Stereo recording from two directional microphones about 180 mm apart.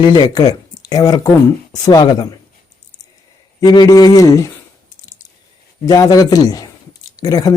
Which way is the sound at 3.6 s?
20° left (ahead or behind).